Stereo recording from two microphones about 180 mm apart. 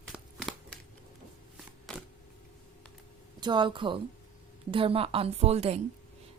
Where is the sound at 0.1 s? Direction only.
Centre (ahead or behind).